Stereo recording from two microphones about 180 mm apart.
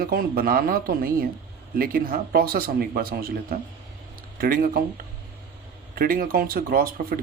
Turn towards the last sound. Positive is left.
turn(degrees=-55)  # may be behind; listen again after turning